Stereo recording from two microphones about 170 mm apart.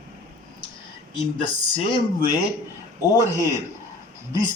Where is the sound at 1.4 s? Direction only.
30° left (ahead or behind).